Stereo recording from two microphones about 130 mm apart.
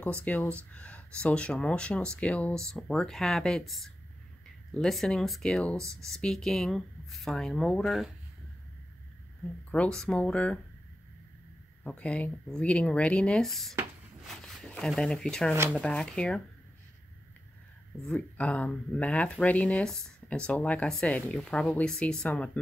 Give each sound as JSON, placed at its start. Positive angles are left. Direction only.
{"t": 0.0, "sound": "speech", "side_deg": 10}
{"t": 9.7, "sound": "speech", "side_deg": 10}
{"t": 11.8, "sound": "speech", "side_deg": 10}
{"t": 18.0, "sound": "speech", "side_deg": 10}